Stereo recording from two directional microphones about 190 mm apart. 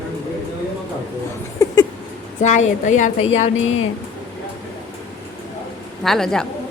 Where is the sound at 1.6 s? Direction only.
15° left (ahead or behind).